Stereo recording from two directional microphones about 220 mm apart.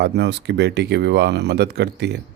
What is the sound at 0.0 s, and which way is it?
Speech, 50° right (ahead or behind).